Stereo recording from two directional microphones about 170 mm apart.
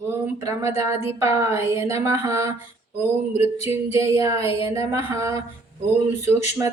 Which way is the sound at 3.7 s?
15° right (ahead or behind).